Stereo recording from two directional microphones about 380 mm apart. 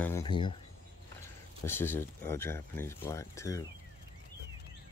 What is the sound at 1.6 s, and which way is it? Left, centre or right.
Speech, centre.